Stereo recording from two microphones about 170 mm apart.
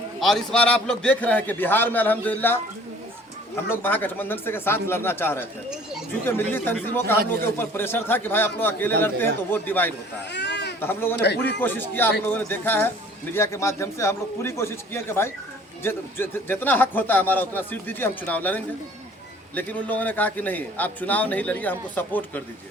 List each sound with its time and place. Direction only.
0.2 s a man's voice: centre (ahead or behind)
10.3 s baby cry: 80° left
10.8 s a man's voice: 15° left (ahead or behind)